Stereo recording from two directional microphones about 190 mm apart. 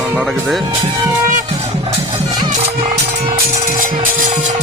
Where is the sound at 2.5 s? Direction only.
40° right (ahead or behind).